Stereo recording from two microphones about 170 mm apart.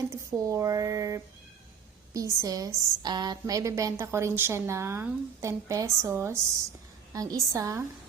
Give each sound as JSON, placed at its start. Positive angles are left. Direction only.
{"t": 0.1, "sound": "a woman's voice", "side_deg": -20}